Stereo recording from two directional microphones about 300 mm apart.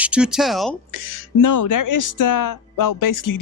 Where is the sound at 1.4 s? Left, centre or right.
Left.